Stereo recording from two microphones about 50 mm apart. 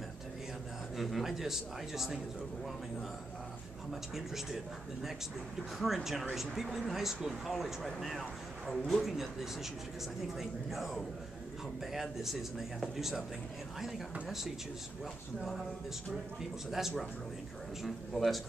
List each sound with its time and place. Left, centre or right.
0.9 s speech: centre
3.9 s speech: centre
5.8 s speech: centre
17.8 s speech: centre